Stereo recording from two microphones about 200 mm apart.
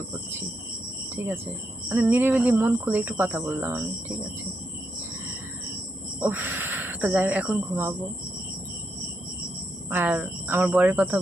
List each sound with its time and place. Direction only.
1.1 s speech: 10° right (ahead or behind)
6.1 s speech: 10° right (ahead or behind)
9.9 s speech: 10° right (ahead or behind)